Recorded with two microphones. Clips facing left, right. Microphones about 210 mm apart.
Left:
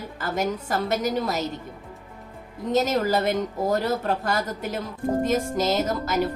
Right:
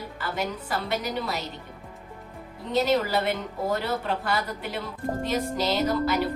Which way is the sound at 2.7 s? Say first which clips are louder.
Left 1 dB; 45° left (ahead or behind).